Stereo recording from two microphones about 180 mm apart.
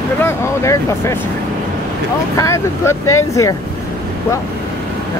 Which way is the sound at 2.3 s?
15° left (ahead or behind).